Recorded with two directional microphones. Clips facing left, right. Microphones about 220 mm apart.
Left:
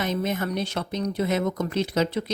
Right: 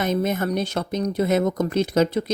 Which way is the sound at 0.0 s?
50° right (ahead or behind).